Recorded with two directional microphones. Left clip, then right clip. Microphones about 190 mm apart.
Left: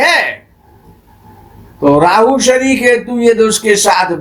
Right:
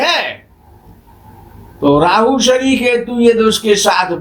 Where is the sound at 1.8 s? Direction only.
35° left (ahead or behind).